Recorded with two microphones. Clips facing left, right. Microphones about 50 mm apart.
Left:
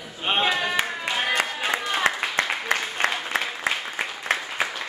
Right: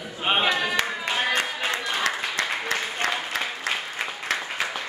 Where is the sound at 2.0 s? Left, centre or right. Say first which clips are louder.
Left 2 dB; left.